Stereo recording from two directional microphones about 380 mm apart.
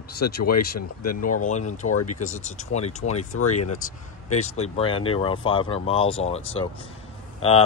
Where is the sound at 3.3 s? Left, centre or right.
Left.